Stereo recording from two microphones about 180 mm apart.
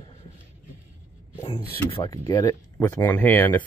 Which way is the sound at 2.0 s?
20° left (ahead or behind).